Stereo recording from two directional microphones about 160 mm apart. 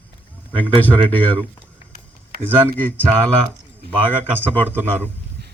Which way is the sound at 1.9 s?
70° right (ahead or behind).